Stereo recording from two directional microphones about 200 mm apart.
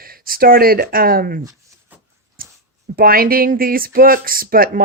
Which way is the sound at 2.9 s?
50° right (ahead or behind).